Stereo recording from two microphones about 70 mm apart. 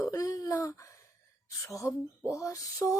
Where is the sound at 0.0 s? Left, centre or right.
Left.